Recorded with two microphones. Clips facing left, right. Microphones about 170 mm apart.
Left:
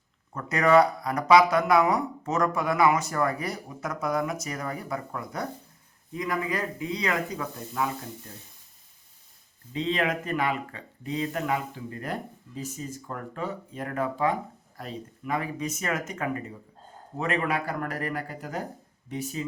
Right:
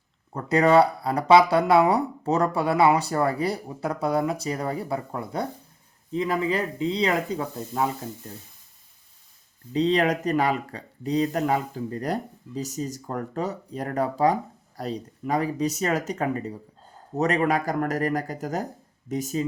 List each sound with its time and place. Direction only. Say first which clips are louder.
0.3 s speech: right 2 dB; 30° right (ahead or behind)
9.7 s speech: right 6 dB; 35° right (ahead or behind)